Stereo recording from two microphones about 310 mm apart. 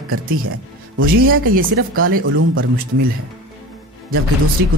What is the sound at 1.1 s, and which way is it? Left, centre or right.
Speech, right.